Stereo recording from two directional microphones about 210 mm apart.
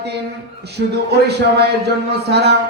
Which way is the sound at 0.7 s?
50° right (ahead or behind).